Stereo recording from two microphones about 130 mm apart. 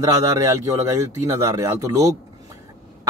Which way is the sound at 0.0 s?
25° right (ahead or behind).